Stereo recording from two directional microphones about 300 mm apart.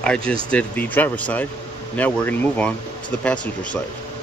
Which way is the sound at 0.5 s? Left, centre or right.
Centre.